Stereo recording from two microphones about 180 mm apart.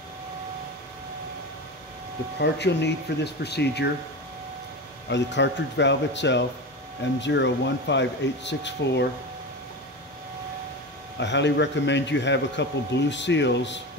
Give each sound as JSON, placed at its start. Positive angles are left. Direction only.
{"t": 2.3, "sound": "speech", "side_deg": 70}
{"t": 5.1, "sound": "a man's voice", "side_deg": 80}
{"t": 11.1, "sound": "a man's voice", "side_deg": 75}